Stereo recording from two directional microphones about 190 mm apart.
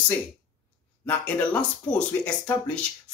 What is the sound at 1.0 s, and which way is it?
Speech, 5° left (ahead or behind).